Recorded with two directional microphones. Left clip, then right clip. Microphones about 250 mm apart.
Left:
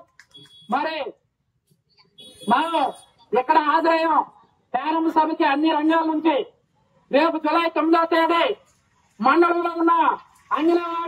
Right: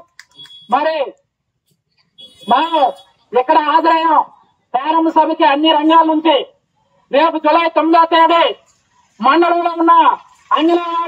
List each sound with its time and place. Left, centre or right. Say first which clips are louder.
0.4 s smoke detector: right 9 dB; right
2.4 s a man's voice: right 8 dB; right